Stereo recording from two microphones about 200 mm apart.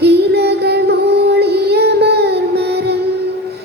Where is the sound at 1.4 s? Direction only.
55° right (ahead or behind).